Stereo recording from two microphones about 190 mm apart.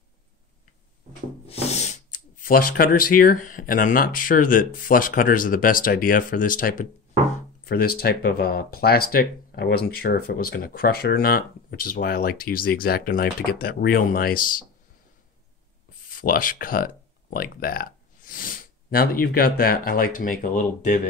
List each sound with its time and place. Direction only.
1.5 s speech: 35° left (ahead or behind)
16.1 s speech: 45° left (ahead or behind)